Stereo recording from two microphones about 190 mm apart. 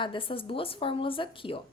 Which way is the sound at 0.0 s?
25° left (ahead or behind).